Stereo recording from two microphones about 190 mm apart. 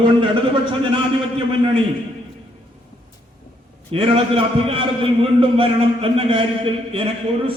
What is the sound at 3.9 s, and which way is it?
A man's voice, 30° right (ahead or behind).